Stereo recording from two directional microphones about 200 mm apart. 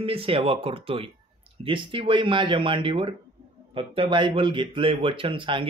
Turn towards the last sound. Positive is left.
turn(degrees=-25)  # may be behind; listen again after turning